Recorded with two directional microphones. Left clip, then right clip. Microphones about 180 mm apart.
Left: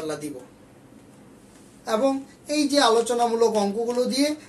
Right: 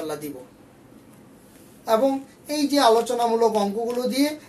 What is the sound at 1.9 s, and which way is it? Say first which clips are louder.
A woman's voice: right 3 dB; 15° left (ahead or behind).